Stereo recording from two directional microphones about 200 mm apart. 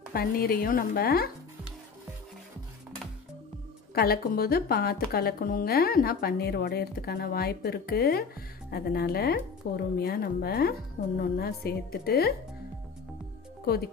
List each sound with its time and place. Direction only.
0.1 s a woman's voice: 50° left (ahead or behind)
3.9 s a woman's voice: 50° left (ahead or behind)